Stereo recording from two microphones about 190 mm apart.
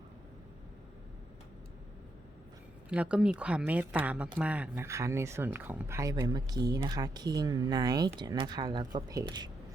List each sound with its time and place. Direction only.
2.9 s speech: 5° right (ahead or behind); by 9.5 s 20° right (ahead or behind)